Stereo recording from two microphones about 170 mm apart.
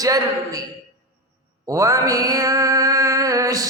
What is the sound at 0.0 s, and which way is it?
Mantra, 20° right (ahead or behind).